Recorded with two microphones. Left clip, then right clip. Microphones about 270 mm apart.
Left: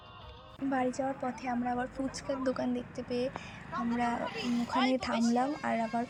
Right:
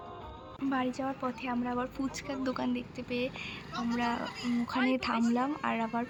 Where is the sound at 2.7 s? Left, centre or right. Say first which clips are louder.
Left 1 dB; right.